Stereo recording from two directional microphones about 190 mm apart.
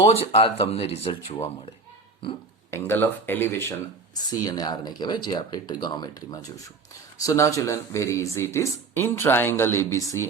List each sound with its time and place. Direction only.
0.1 s speech: 30° left (ahead or behind)
2.6 s speech: 10° left (ahead or behind)